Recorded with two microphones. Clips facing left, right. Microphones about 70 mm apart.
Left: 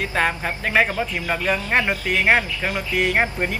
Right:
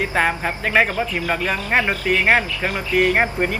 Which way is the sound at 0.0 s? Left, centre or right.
Centre.